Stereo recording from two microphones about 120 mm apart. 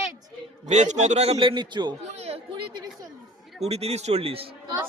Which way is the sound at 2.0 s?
60° right (ahead or behind).